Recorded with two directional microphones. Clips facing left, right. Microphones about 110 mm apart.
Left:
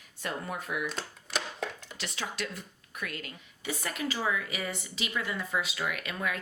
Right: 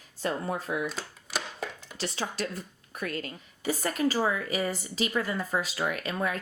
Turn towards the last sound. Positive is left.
turn(degrees=-35)  # may be behind; listen again after turning